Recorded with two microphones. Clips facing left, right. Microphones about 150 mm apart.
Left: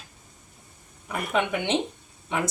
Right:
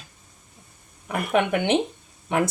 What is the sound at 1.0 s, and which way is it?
Speech, 60° right (ahead or behind).